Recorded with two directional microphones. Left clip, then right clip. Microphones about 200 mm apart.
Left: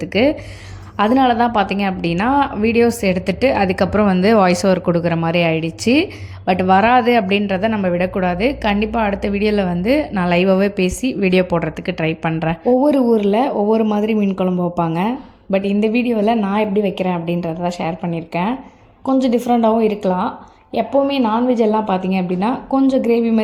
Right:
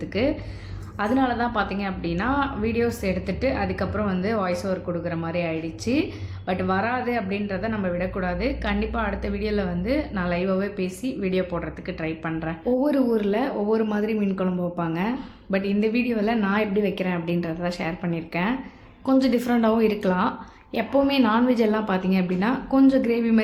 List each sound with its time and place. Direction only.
0.0 s a woman's voice: 40° left (ahead or behind); by 23.4 s 20° left (ahead or behind)